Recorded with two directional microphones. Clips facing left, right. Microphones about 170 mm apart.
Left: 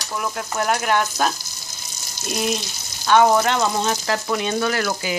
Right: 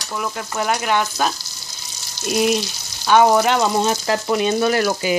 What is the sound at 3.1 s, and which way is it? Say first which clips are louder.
Frying: right 2 dB; 10° right (ahead or behind).